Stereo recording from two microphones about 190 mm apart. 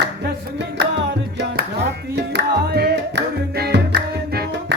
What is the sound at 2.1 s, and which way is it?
Music, 60° right (ahead or behind).